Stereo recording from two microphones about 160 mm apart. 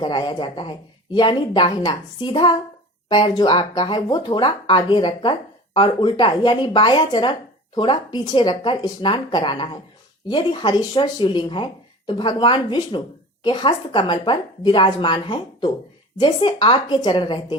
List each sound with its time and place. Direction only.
0.0 s speech: 30° left (ahead or behind)